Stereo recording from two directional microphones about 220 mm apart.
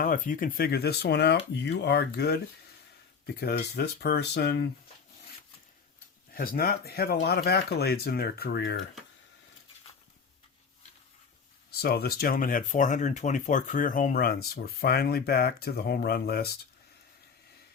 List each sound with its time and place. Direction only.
0.0 s speech: 40° left (ahead or behind)
6.3 s speech: 40° left (ahead or behind)
11.8 s speech: 45° left (ahead or behind)